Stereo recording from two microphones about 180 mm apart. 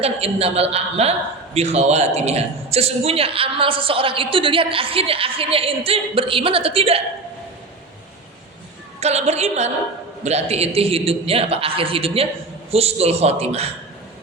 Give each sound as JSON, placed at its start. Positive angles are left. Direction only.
{"t": 0.0, "sound": "a man's voice", "side_deg": -35}
{"t": 9.0, "sound": "a man's voice", "side_deg": -35}